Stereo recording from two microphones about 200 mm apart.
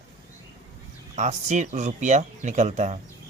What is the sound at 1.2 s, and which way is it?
Speech, 35° right (ahead or behind).